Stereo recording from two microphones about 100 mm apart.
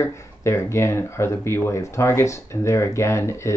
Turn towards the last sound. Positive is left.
turn(degrees=30)  # may be behind; listen again after turning